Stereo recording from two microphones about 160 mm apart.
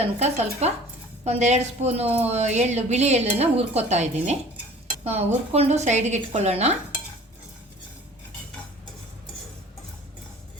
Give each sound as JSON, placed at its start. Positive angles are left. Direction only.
{"t": 0.0, "sound": "a woman's voice", "side_deg": -40}